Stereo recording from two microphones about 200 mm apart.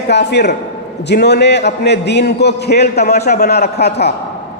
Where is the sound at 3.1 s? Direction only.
35° left (ahead or behind).